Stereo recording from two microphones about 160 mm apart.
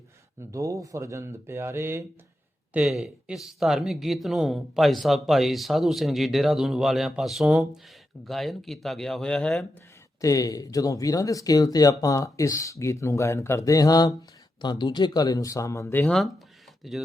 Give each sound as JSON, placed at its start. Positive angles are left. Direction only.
{"t": 0.5, "sound": "speech", "side_deg": -20}
{"t": 2.7, "sound": "speech", "side_deg": -5}
{"t": 10.2, "sound": "speech", "side_deg": 20}